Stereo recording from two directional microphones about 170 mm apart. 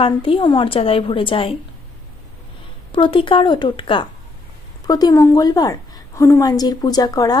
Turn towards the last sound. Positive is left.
turn(degrees=20)  # may be behind; listen again after turning